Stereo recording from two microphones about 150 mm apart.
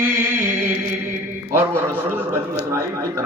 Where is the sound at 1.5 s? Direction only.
15° right (ahead or behind).